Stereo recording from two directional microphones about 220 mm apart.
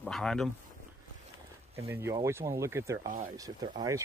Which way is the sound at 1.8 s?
10° right (ahead or behind).